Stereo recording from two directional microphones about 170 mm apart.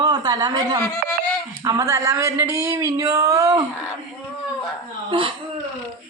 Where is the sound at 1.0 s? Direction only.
65° right (ahead or behind).